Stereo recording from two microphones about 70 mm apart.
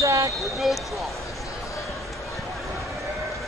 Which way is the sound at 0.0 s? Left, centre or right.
Right.